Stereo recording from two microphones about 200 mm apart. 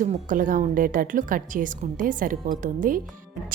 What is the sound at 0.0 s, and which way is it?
A woman's voice, 40° right (ahead or behind).